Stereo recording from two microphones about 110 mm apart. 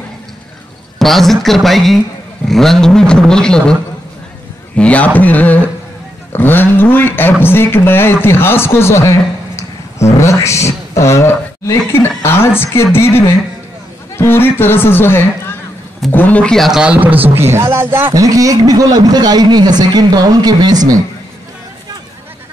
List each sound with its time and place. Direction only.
0.9 s speech: centre (ahead or behind)
4.7 s a sound: 10° left (ahead or behind)
6.3 s a man's voice: 20° left (ahead or behind)
10.1 s a man's voice: 25° left (ahead or behind); by 18.1 s 20° right (ahead or behind)
18.1 s a man's voice: 30° right (ahead or behind)